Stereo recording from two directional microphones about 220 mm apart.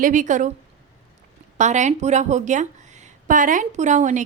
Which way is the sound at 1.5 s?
35° right (ahead or behind).